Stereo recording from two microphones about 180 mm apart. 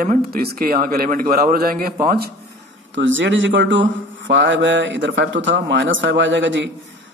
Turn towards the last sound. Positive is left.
turn(degrees=-90)